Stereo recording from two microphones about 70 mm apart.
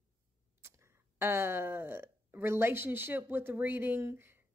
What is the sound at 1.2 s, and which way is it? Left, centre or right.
Speech, right.